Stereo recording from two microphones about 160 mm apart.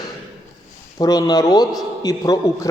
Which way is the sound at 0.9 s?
25° left (ahead or behind).